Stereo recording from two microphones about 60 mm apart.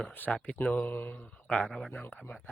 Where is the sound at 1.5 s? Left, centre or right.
Centre.